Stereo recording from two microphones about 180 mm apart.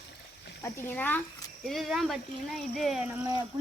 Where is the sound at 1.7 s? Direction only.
Centre (ahead or behind).